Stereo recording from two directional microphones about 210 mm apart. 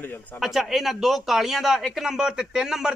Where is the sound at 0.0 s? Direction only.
10° left (ahead or behind).